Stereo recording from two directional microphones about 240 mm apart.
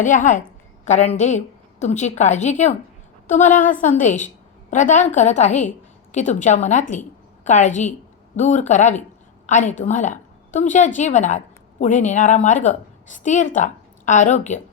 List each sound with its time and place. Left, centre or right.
0.0 s a woman's voice: left